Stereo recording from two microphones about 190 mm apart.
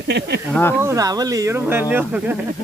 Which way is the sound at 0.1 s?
65° right (ahead or behind).